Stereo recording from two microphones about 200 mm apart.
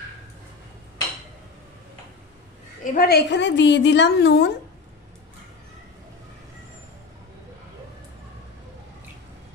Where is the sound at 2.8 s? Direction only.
45° left (ahead or behind).